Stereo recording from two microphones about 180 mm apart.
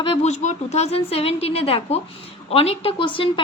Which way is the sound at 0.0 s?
35° left (ahead or behind).